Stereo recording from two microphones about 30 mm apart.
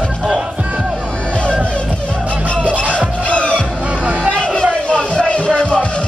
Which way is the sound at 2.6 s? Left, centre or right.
Right.